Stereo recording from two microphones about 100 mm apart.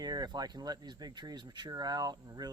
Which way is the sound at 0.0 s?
45° right (ahead or behind).